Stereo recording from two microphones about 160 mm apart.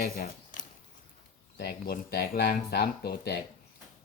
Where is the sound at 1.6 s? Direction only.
70° left (ahead or behind).